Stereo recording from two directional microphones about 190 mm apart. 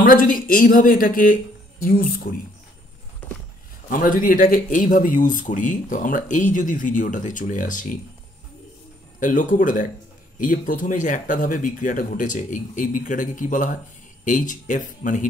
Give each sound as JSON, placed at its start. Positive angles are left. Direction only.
{"t": 0.0, "sound": "speech", "side_deg": 45}
{"t": 3.9, "sound": "speech", "side_deg": 45}
{"t": 9.2, "sound": "speech", "side_deg": 45}